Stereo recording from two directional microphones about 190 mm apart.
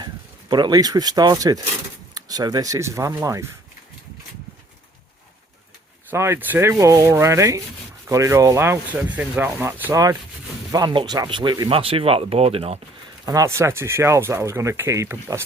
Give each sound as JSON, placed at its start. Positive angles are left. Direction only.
{"t": 0.0, "sound": "speech", "side_deg": -25}
{"t": 6.1, "sound": "speech", "side_deg": -15}
{"t": 13.2, "sound": "speech", "side_deg": -15}